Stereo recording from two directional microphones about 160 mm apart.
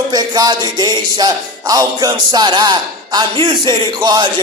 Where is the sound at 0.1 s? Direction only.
25° right (ahead or behind).